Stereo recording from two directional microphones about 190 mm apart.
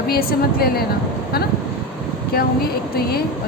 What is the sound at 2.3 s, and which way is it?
Speech, 55° left (ahead or behind).